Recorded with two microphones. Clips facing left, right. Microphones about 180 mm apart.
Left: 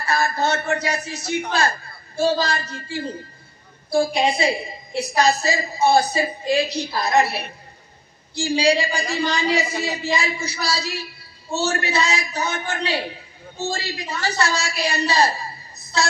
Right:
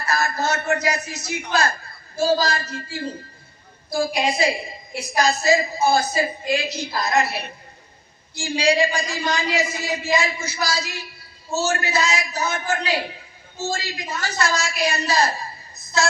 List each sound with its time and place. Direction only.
0.1 s a man's voice: 30° left (ahead or behind)
8.4 s a man's voice: 30° left (ahead or behind)